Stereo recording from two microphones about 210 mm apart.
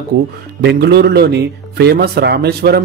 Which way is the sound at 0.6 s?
50° right (ahead or behind).